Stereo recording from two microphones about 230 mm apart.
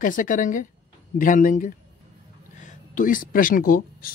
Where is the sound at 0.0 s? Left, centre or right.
Left.